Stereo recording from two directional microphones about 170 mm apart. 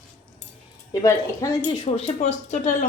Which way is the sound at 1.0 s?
20° left (ahead or behind).